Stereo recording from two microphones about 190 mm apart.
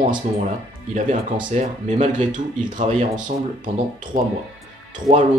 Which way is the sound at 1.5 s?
40° right (ahead or behind).